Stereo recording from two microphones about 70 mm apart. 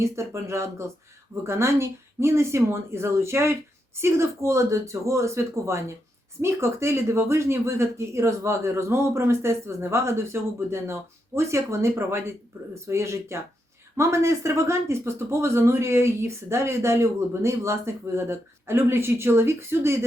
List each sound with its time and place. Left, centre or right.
0.0 s speech: right